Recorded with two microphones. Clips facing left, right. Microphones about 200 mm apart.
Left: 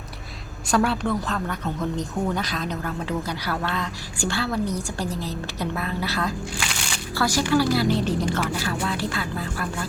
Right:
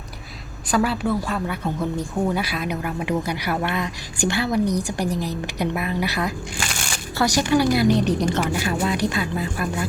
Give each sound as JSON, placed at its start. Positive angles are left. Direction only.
{"t": 0.7, "sound": "speech", "side_deg": -5}
{"t": 6.7, "sound": "music", "side_deg": -45}
{"t": 7.2, "sound": "a woman's voice", "side_deg": -20}